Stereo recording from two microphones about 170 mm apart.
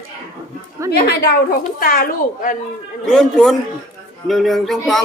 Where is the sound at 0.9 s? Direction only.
65° left (ahead or behind).